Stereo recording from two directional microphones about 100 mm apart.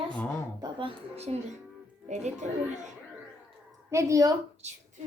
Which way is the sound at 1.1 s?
90° right.